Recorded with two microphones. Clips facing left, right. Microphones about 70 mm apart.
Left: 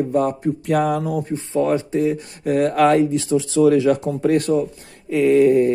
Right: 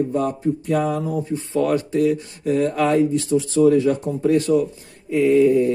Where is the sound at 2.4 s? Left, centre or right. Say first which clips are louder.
Left 4 dB; left.